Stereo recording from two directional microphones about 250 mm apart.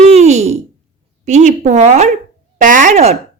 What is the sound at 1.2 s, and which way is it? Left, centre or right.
Speech, right.